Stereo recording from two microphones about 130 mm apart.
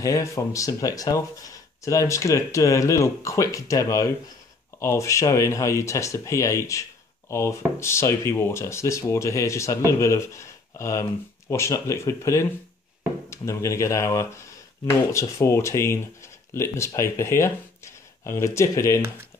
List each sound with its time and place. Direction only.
0.0 s speech: 25° left (ahead or behind)